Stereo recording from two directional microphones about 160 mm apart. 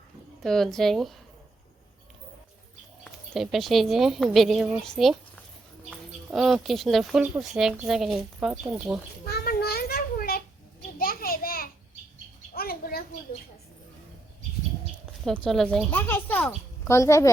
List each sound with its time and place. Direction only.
0.4 s speech: centre (ahead or behind)
3.0 s speech: centre (ahead or behind)
9.2 s a sound: 75° left (ahead or behind)
15.2 s speech: centre (ahead or behind)
15.9 s speech: 10° left (ahead or behind)